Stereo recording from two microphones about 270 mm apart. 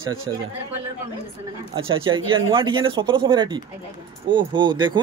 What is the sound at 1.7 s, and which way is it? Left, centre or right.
Speech, centre.